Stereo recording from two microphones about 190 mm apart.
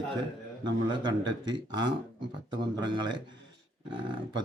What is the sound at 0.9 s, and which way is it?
A man's voice, 25° right (ahead or behind).